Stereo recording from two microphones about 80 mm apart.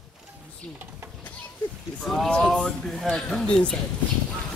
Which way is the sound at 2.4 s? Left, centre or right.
Centre.